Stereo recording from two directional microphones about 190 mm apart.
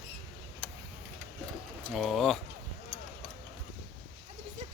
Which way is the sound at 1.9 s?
Centre (ahead or behind).